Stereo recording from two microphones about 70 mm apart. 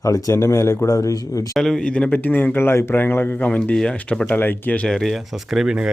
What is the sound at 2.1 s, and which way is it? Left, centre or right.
Speech, left.